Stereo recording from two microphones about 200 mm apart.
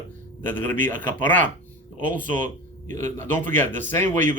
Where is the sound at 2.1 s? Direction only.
40° right (ahead or behind).